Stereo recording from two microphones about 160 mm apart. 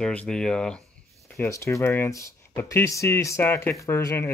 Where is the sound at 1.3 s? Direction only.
15° left (ahead or behind).